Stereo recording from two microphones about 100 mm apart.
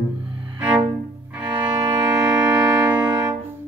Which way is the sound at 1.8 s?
35° right (ahead or behind).